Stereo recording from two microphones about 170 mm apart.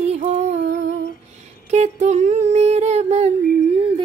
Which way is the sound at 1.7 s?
40° right (ahead or behind).